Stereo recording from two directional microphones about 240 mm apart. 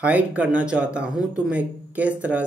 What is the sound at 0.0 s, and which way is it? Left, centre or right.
Speech, centre.